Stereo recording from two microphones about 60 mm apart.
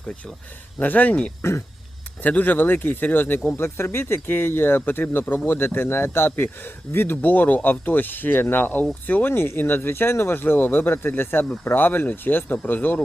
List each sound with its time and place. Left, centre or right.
0.8 s speech: left
1.4 s speech: left
2.2 s a man's voice: left